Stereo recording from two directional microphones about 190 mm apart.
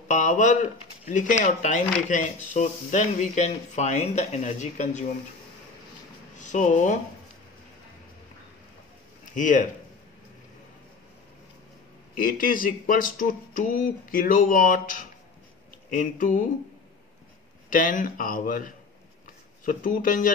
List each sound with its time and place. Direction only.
0.1 s speech: 40° left (ahead or behind)
6.3 s speech: 40° left (ahead or behind)
9.3 s speech: 40° left (ahead or behind)
12.2 s speech: 45° left (ahead or behind)
17.6 s speech: 45° left (ahead or behind)